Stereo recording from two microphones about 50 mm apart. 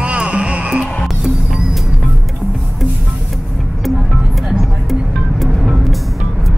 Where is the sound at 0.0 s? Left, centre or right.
Right.